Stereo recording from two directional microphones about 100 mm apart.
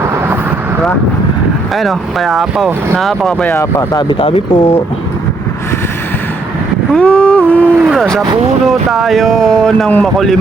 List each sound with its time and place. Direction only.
1.7 s speech: centre (ahead or behind)
3.5 s speech: 25° left (ahead or behind)
3.9 s speech: 55° left (ahead or behind); by 4.8 s 80° left
6.9 s boat: 10° left (ahead or behind)
7.9 s vehicle: centre (ahead or behind)
8.6 s speech: centre (ahead or behind)